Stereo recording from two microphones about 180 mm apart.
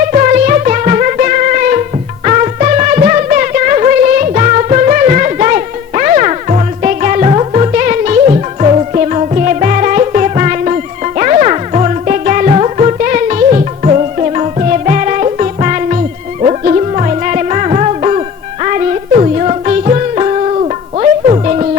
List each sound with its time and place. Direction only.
0.1 s music: 40° right (ahead or behind)